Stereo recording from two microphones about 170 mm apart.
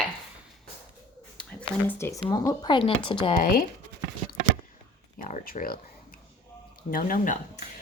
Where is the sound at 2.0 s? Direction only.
20° left (ahead or behind).